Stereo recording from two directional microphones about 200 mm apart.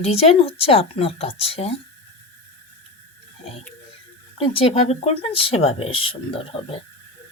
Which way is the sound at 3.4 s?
30° left (ahead or behind).